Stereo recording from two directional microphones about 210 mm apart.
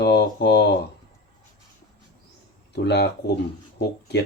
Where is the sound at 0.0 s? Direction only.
55° left (ahead or behind).